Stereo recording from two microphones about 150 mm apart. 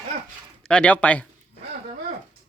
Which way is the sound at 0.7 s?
10° left (ahead or behind).